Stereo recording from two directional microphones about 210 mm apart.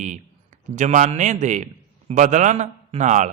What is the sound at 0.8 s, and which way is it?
A man's voice, 35° right (ahead or behind).